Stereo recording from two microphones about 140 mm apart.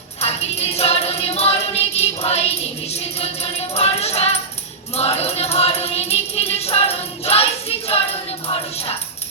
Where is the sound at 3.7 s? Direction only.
45° left (ahead or behind).